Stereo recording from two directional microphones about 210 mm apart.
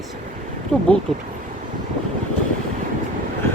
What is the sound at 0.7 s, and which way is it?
Speech, 5° left (ahead or behind).